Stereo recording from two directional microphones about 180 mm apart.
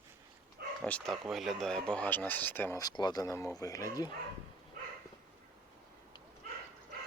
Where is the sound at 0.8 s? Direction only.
5° left (ahead or behind).